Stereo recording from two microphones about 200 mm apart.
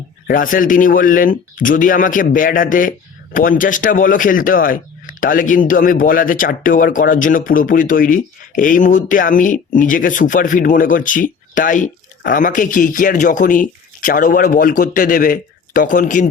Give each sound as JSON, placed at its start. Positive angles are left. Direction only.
{"t": 0.3, "sound": "a man's voice", "side_deg": 45}